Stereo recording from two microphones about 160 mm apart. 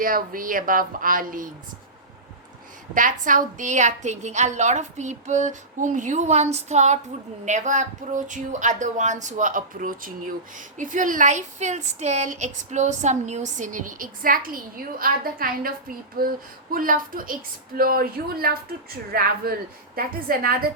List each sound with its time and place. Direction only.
0.0 s a woman's voice: 60° right (ahead or behind)
2.9 s a woman's voice: 55° right (ahead or behind)